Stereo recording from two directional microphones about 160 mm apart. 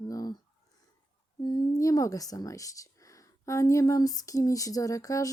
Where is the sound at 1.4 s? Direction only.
25° left (ahead or behind).